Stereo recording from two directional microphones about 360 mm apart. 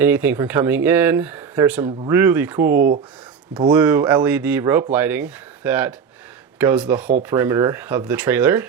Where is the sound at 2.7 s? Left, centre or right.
Right.